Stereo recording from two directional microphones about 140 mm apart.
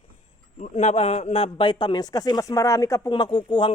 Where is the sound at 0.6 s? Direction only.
55° left (ahead or behind); by 3.1 s 20° left (ahead or behind).